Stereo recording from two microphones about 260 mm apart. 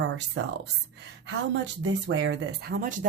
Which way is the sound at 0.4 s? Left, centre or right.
Right.